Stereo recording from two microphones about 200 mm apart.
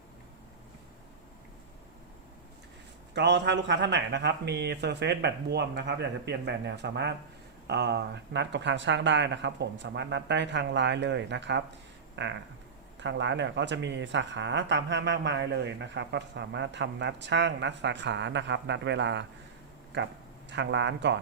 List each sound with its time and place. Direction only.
3.2 s speech: 60° right (ahead or behind)